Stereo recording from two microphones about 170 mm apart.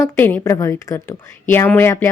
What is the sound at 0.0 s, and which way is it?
A woman's voice, 10° left (ahead or behind).